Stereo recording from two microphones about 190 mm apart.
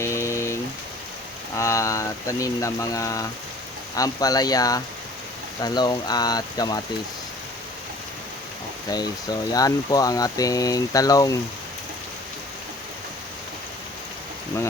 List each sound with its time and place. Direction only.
0.0 s rain: 15° left (ahead or behind)
1.5 s speech: 15° left (ahead or behind)
8.9 s speech: 20° left (ahead or behind)